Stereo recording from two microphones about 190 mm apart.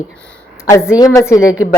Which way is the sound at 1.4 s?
5° right (ahead or behind).